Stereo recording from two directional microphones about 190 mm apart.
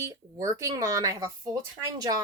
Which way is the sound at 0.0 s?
15° right (ahead or behind).